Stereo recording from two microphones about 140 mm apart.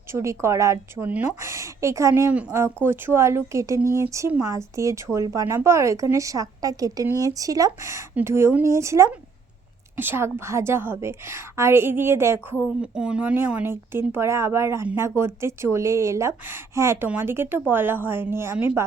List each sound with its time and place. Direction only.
0.1 s a woman's voice: 20° right (ahead or behind)
12.6 s a woman's voice: 5° right (ahead or behind)